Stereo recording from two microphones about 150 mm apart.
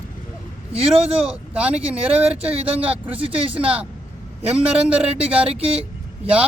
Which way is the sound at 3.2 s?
40° right (ahead or behind).